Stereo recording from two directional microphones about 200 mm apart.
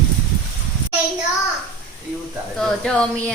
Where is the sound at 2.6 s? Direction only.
5° left (ahead or behind).